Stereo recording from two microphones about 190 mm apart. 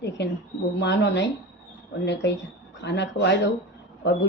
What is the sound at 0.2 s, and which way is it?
Speech, 65° left (ahead or behind).